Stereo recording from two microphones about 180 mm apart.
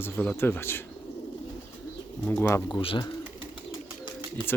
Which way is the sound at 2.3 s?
10° left (ahead or behind).